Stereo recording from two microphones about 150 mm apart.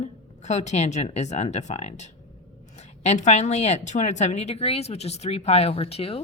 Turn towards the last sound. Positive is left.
turn(degrees=40)  # may be behind; listen again after turning